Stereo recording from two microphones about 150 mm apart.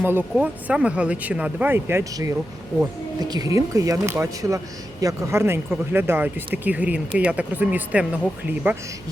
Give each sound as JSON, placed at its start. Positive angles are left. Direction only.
{"t": 0.0, "sound": "speech", "side_deg": -15}